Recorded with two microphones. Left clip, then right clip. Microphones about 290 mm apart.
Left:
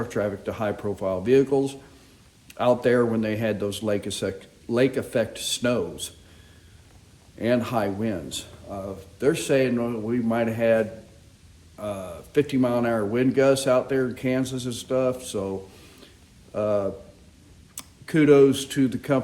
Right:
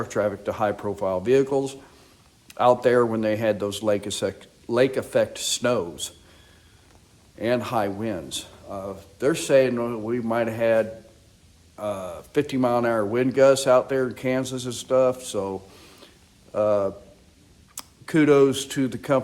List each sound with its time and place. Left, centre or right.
0.0 s a man's voice: right
7.3 s a man's voice: centre